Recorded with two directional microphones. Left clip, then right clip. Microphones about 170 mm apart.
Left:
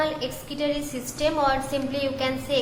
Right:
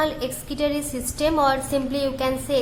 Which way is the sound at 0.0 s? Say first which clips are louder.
Right 2 dB; 25° right (ahead or behind).